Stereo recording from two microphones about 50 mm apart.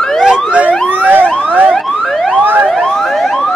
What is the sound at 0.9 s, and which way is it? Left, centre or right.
Emergency vehicle, right.